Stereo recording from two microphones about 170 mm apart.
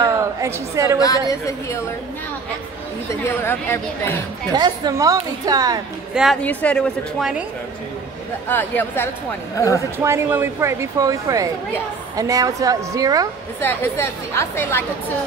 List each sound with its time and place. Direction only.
0.0 s a sound: 20° right (ahead or behind)
0.9 s a woman's voice: 20° left (ahead or behind)
3.3 s a woman's voice: 15° left (ahead or behind)
4.5 s a woman's voice: 25° right (ahead or behind)
6.4 s a woman's voice: 10° left (ahead or behind)
8.5 s a woman's voice: 10° left (ahead or behind)
9.9 s a woman's voice: 15° right (ahead or behind)
13.6 s a woman's voice: 15° left (ahead or behind)